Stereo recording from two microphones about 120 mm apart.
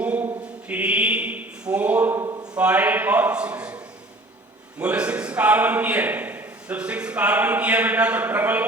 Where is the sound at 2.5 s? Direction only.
10° right (ahead or behind).